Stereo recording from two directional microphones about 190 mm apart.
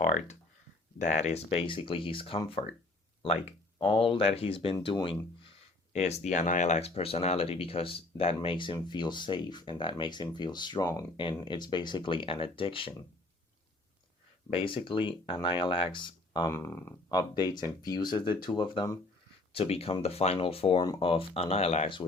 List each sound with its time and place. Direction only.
0.0 s speech: 40° left (ahead or behind)
14.5 s speech: 30° left (ahead or behind)
16.5 s speech: 15° left (ahead or behind)
17.2 s speech: 20° left (ahead or behind)